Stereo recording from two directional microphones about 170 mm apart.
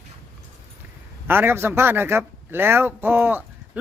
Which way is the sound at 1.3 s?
15° right (ahead or behind).